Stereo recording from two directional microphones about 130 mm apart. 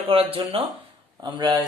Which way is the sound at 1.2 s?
35° right (ahead or behind).